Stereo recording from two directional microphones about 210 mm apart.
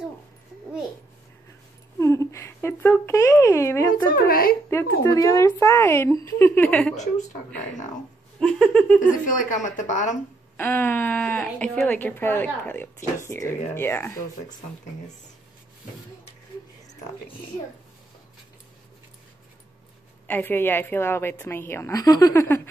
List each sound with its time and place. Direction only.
2.0 s speech: 15° left (ahead or behind)
4.1 s speech: 45° left (ahead or behind)
4.6 s speech: 15° left (ahead or behind)
8.4 s a sound: centre (ahead or behind)
9.0 s a woman's voice: 40° left (ahead or behind)
10.6 s speech: 10° left (ahead or behind)
20.2 s speech: 10° left (ahead or behind)